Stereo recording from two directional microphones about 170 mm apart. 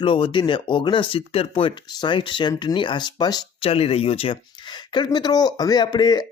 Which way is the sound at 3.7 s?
35° left (ahead or behind).